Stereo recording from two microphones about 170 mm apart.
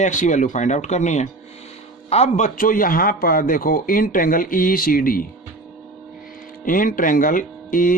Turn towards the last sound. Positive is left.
turn(degrees=55)  # may be behind; listen again after turning